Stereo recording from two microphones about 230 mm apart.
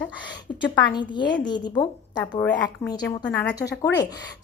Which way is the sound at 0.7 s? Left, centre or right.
Centre.